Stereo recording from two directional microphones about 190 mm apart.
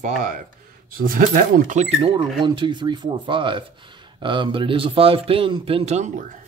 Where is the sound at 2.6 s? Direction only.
25° right (ahead or behind).